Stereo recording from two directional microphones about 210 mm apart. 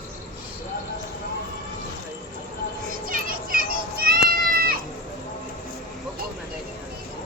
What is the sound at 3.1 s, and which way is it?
Children playing, 45° right (ahead or behind).